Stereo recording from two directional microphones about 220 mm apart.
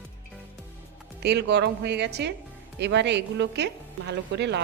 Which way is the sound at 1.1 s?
50° right (ahead or behind).